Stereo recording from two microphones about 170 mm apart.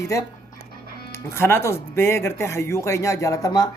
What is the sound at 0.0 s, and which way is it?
Speech, 20° left (ahead or behind).